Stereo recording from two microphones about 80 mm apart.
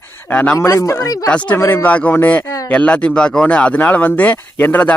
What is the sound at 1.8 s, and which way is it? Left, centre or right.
A man's voice, centre.